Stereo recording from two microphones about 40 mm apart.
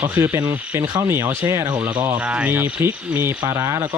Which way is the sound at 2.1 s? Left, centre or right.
Right.